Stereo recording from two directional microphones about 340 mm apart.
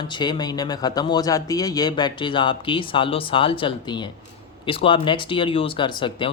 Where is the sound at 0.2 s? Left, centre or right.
Centre.